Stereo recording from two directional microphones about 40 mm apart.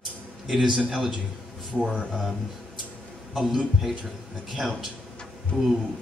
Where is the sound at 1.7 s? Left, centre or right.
Right.